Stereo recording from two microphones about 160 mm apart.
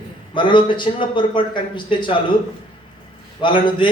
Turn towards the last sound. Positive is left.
turn(degrees=30)  # may be behind; listen again after turning